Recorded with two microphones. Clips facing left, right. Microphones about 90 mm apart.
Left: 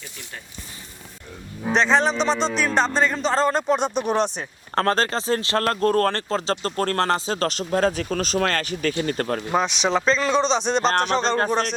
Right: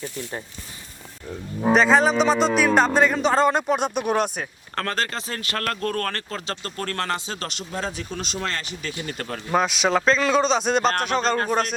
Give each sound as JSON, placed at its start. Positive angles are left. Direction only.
{"t": 1.7, "sound": "a man's voice", "side_deg": -5}
{"t": 4.7, "sound": "speech", "side_deg": 35}
{"t": 9.5, "sound": "a man's voice", "side_deg": -5}
{"t": 10.8, "sound": "speech", "side_deg": 35}